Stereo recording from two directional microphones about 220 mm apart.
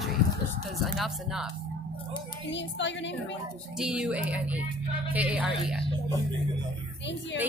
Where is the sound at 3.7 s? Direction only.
5° right (ahead or behind).